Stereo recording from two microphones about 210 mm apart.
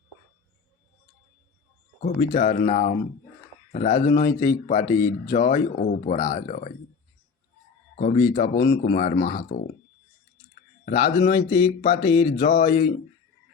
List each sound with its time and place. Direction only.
2.0 s speech: 40° left (ahead or behind)
4.9 s speech: 15° left (ahead or behind)
5.3 s speech: 40° left (ahead or behind)
7.9 s speech: 40° left (ahead or behind)
10.8 s speech: 40° left (ahead or behind)
11.3 s speech: 20° left (ahead or behind)
11.6 s a sound: 45° left (ahead or behind)